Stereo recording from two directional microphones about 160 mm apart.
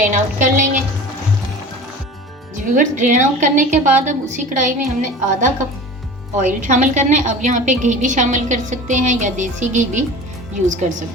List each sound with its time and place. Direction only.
0.0 s a woman's voice: 50° right (ahead or behind)
2.7 s a woman's voice: 50° right (ahead or behind)